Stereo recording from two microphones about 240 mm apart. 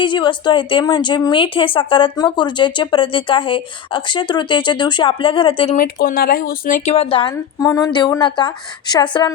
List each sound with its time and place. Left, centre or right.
0.0 s speech: centre
5.7 s speech: left; by 9.3 s centre